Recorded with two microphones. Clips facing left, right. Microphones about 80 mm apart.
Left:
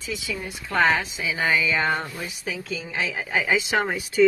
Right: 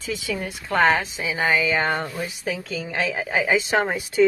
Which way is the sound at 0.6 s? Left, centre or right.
Right.